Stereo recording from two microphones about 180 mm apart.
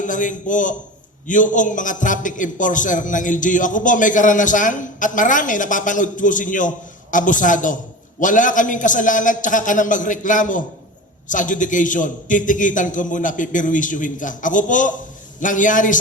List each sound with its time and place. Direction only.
0.0 s a man's voice: 45° left (ahead or behind)